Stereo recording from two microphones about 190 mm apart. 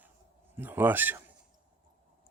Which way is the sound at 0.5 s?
10° right (ahead or behind).